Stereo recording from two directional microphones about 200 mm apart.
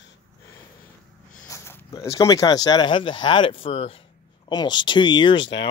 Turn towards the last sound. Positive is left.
turn(degrees=25)  # may be behind; listen again after turning